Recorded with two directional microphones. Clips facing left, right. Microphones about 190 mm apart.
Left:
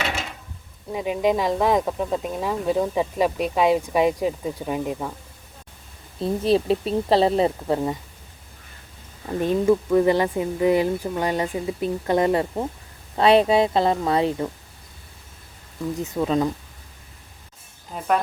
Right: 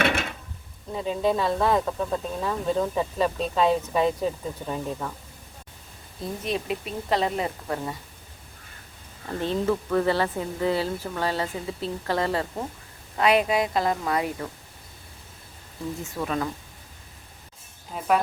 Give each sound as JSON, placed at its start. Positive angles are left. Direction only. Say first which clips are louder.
{"t": 0.0, "sound": "drawer open or close", "louder": "right 4 dB", "side_deg": -55}
{"t": 0.9, "sound": "speech", "louder": "left 3 dB", "side_deg": 15}
{"t": 6.2, "sound": "speech", "louder": "left 9 dB", "side_deg": 30}
{"t": 9.2, "sound": "a woman's voice", "louder": "left 5 dB", "side_deg": 15}
{"t": 16.0, "sound": "a woman's voice", "louder": "left 7 dB", "side_deg": 20}
{"t": 17.9, "sound": "speech", "louder": "left 1 dB", "side_deg": 0}